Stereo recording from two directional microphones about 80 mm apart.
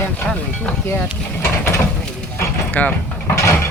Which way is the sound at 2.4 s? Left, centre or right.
Left.